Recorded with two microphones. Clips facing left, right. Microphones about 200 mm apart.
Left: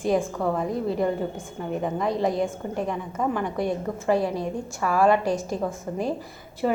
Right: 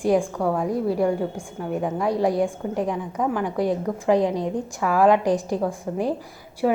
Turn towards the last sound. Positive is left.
turn(degrees=-5)  # may be behind; listen again after turning